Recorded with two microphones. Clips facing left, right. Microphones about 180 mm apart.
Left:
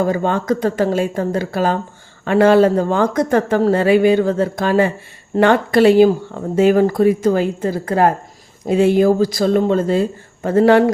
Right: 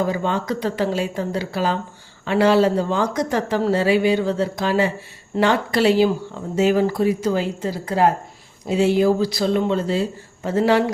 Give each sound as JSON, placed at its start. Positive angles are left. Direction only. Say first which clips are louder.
{"t": 0.0, "sound": "speech", "louder": "left 4 dB", "side_deg": 50}